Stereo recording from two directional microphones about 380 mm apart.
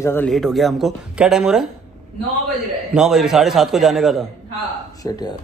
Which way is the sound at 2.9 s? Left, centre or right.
Centre.